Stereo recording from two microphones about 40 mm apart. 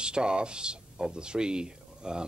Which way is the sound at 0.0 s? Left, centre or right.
Right.